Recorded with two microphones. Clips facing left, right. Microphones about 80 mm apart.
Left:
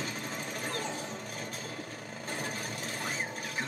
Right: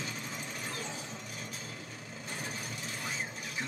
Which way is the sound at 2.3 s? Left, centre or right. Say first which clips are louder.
Left 4 dB; left.